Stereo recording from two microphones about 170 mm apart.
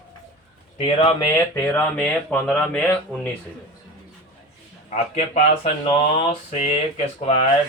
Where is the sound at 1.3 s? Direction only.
10° left (ahead or behind).